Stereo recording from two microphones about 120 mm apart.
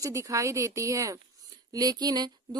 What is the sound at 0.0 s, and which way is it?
Speech, 25° right (ahead or behind).